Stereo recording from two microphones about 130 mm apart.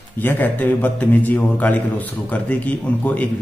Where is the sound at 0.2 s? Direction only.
15° left (ahead or behind).